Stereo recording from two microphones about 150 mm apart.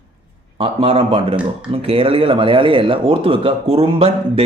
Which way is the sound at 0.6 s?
40° right (ahead or behind).